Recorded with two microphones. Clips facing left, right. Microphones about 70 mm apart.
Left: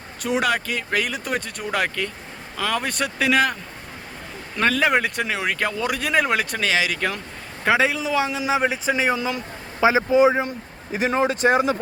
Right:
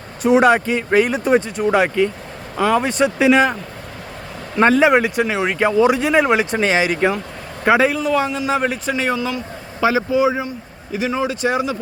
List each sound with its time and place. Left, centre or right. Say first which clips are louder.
0.3 s speech: right 9 dB; right
1.4 s speech: right 8 dB; centre
4.9 s speech: right 6 dB; centre
7.6 s a man's voice: right 5 dB; centre; by 11.8 s left